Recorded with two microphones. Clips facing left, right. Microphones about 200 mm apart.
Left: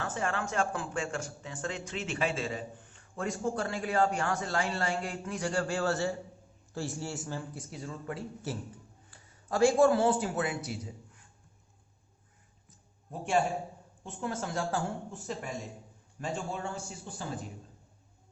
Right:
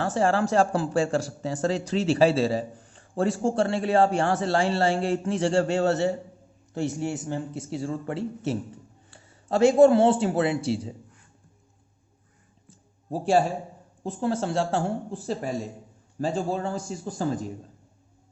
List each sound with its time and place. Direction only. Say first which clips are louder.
0.0 s speech: right 10 dB; 35° right (ahead or behind)
13.1 s speech: right 7 dB; 35° right (ahead or behind)